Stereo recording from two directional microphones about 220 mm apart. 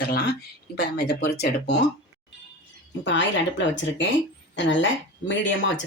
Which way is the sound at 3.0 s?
55° left (ahead or behind).